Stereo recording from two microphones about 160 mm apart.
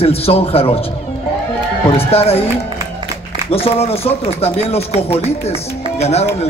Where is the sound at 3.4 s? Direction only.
40° left (ahead or behind).